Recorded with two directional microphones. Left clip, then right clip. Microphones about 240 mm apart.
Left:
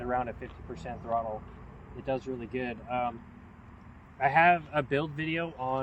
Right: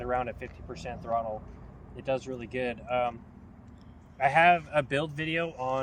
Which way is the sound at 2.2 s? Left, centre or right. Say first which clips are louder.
Right 2 dB; right.